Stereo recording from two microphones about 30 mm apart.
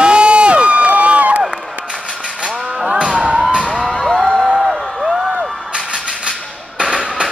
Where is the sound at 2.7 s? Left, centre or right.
Right.